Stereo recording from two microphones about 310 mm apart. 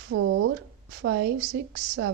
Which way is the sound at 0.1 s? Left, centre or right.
Right.